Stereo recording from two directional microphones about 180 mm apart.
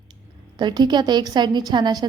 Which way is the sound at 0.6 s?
25° right (ahead or behind).